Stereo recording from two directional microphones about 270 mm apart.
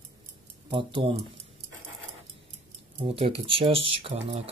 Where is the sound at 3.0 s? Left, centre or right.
Right.